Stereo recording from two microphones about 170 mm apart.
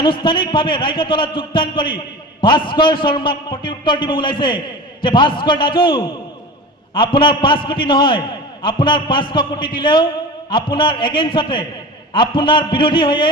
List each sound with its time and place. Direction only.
0.0 s a man's voice: 30° left (ahead or behind)